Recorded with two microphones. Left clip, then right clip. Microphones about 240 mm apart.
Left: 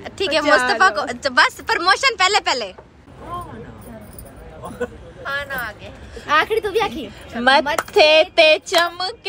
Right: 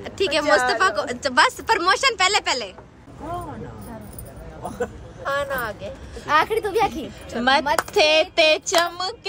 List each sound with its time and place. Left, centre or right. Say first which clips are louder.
0.0 s a woman's voice: left 2 dB; centre
4.7 s speech: left 2 dB; right
6.1 s a woman's voice: left 2 dB; centre